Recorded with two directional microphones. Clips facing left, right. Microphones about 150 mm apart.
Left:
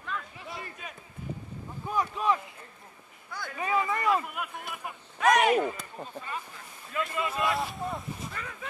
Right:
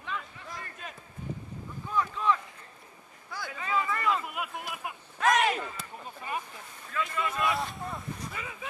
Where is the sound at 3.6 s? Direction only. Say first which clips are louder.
Left 2 dB; 15° left (ahead or behind).